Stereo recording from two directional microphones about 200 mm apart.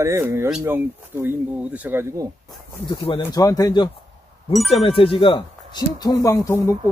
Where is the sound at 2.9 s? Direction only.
25° left (ahead or behind).